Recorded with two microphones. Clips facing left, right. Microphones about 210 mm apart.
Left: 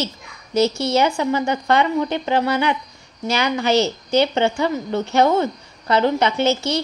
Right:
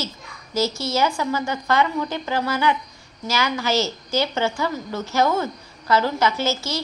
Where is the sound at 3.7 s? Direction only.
60° left (ahead or behind).